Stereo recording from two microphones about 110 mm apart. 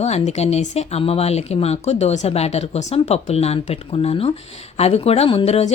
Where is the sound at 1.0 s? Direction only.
65° left (ahead or behind).